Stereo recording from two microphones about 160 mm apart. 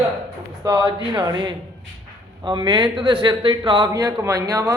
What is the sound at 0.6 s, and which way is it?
Speech, 25° right (ahead or behind).